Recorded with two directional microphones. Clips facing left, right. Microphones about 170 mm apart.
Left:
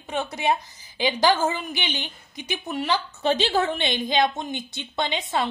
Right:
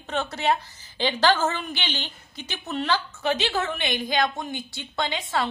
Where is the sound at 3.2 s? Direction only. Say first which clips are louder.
Left 6 dB; 30° left (ahead or behind).